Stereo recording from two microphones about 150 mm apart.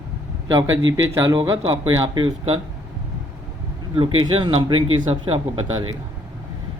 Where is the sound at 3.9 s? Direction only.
35° right (ahead or behind).